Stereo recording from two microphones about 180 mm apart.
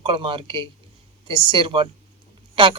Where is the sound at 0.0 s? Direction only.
30° right (ahead or behind).